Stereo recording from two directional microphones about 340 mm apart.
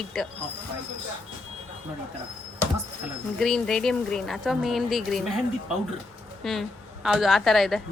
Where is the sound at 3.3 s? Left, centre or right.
Centre.